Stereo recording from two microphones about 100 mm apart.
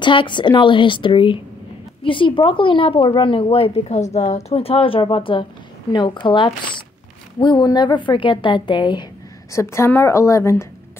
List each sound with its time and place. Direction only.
0.0 s a woman's voice: 55° left (ahead or behind)
9.5 s a woman's voice: 30° left (ahead or behind)